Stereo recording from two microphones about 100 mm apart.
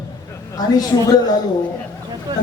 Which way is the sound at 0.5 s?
40° left (ahead or behind).